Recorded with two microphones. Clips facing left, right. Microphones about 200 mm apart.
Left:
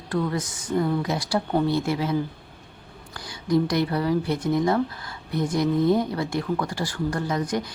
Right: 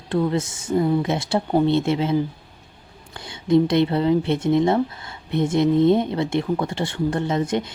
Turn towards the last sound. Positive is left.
turn(degrees=-25)  # may be behind; listen again after turning